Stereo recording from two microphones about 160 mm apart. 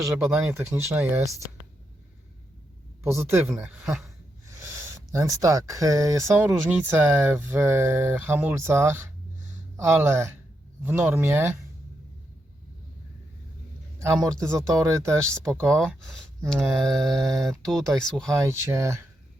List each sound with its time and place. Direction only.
0.3 s speech: 15° right (ahead or behind)
3.2 s speech: 15° right (ahead or behind)
3.5 s speech: centre (ahead or behind)
5.1 s speech: 20° right (ahead or behind)
14.2 s speech: 5° left (ahead or behind)
14.5 s speech: 20° right (ahead or behind)
15.8 s speech: centre (ahead or behind)
16.8 s speech: 20° right (ahead or behind)
17.5 s speech: 5° left (ahead or behind)
18.3 s speech: 15° right (ahead or behind)